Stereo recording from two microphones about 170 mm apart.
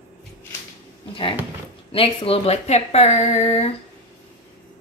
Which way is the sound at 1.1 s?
30° left (ahead or behind).